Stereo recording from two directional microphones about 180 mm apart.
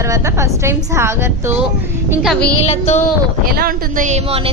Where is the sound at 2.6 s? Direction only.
40° left (ahead or behind).